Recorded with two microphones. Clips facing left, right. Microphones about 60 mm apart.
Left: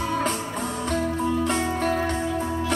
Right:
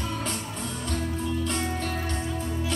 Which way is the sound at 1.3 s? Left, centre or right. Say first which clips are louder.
Left 5 dB; left.